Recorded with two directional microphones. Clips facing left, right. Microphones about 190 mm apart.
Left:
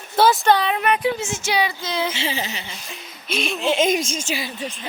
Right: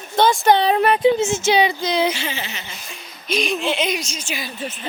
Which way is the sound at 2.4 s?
40° left (ahead or behind).